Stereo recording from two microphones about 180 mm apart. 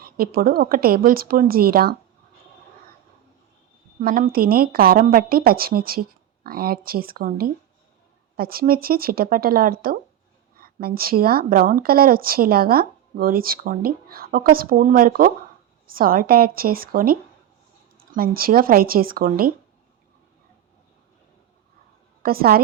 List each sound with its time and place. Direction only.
0.0 s a woman's voice: 55° right (ahead or behind)
4.0 s a woman's voice: 55° right (ahead or behind)
22.2 s a woman's voice: 55° right (ahead or behind)